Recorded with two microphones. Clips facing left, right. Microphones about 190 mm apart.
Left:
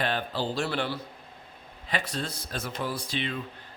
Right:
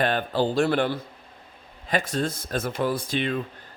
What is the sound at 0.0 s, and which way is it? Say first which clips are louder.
Speech: right 6 dB; 50° right (ahead or behind).